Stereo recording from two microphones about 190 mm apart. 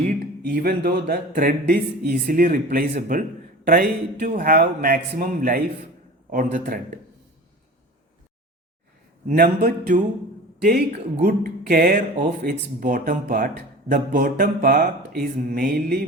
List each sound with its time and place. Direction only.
0.4 s speech: 50° right (ahead or behind)
9.2 s speech: 50° right (ahead or behind)